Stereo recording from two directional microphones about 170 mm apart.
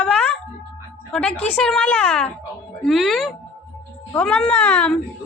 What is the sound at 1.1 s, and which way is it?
A woman's voice, 5° left (ahead or behind).